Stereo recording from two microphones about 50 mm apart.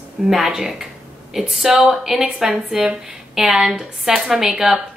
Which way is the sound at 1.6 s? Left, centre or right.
Centre.